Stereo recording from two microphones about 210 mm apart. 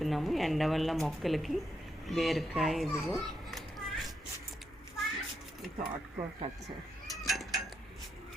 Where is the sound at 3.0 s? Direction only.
Centre (ahead or behind).